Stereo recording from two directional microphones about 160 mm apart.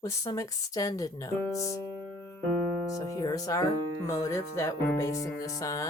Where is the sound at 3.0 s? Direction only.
25° left (ahead or behind).